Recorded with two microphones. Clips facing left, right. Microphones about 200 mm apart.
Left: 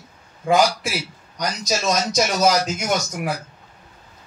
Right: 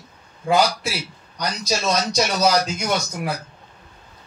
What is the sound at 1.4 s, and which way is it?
Speech, 45° left (ahead or behind).